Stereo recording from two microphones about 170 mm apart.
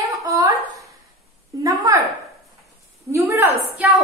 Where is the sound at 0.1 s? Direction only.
20° right (ahead or behind).